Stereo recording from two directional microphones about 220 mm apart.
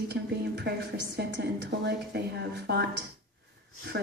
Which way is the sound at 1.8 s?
50° right (ahead or behind).